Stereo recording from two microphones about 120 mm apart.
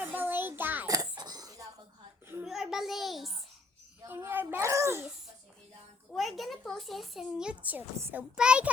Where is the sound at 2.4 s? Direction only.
5° right (ahead or behind).